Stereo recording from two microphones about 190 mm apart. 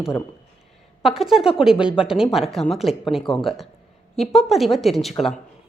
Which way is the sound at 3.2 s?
25° left (ahead or behind).